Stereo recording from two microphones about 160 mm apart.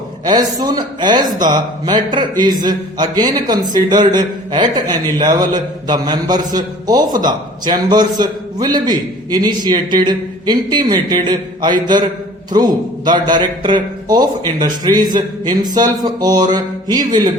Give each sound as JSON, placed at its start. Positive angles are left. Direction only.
{"t": 0.3, "sound": "a man's voice", "side_deg": -25}